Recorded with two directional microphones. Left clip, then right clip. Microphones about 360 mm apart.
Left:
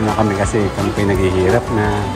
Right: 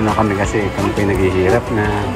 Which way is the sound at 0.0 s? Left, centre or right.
Centre.